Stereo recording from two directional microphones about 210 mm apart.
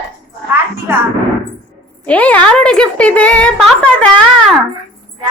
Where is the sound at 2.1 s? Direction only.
5° left (ahead or behind).